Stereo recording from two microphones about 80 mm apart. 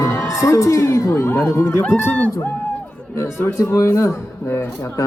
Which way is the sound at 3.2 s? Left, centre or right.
Left.